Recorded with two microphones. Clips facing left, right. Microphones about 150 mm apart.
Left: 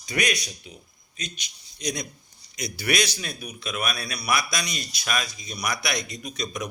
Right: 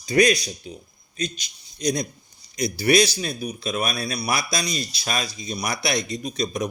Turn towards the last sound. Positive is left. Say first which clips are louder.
# right 6 dB
turn(degrees=-30)  # may be behind; listen again after turning